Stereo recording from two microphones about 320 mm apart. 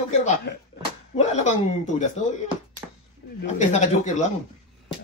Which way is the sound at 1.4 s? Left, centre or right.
Left.